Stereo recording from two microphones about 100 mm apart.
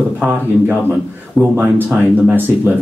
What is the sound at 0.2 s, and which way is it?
Speech, 15° right (ahead or behind).